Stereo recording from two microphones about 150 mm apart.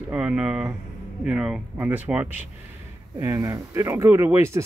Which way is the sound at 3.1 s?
20° right (ahead or behind).